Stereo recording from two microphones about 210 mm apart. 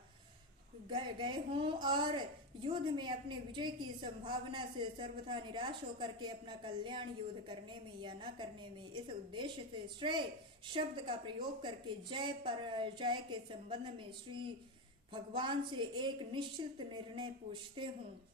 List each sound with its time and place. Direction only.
0.8 s a woman's voice: 25° right (ahead or behind)